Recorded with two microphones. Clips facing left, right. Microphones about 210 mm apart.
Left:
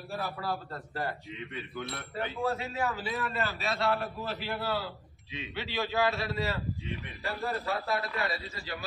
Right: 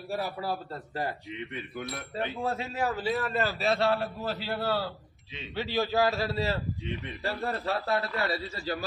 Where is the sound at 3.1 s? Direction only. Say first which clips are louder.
Right 5 dB; 40° right (ahead or behind).